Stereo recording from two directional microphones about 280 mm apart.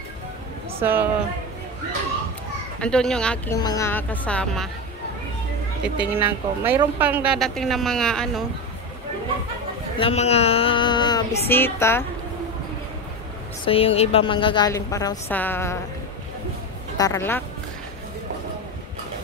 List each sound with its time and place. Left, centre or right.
0.7 s speech: centre
2.8 s a woman's voice: centre
5.9 s a woman's voice: centre
9.9 s a woman's voice: left
13.7 s a woman's voice: centre
16.9 s speech: centre